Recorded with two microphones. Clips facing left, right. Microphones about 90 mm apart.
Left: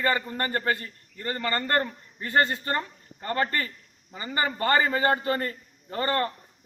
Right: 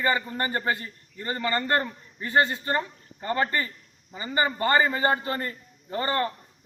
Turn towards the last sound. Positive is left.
turn(degrees=-20)  # may be behind; listen again after turning